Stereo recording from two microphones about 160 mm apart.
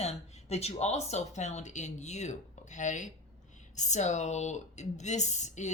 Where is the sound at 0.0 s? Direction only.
40° left (ahead or behind).